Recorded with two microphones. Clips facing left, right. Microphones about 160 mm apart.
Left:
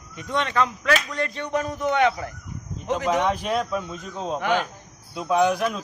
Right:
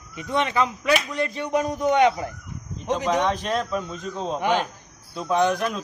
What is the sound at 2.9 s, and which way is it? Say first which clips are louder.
A man's voice: even; 10° left (ahead or behind).